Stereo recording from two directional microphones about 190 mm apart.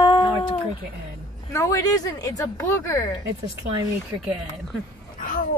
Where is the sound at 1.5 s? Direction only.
15° left (ahead or behind).